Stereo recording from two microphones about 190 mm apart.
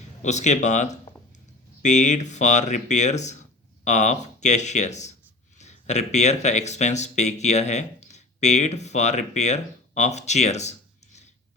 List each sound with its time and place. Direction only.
0.2 s speech: 40° left (ahead or behind)